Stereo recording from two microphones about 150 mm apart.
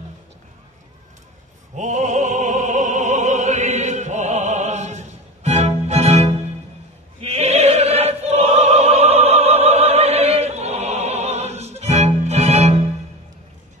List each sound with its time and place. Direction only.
1.8 s opera: 55° right (ahead or behind)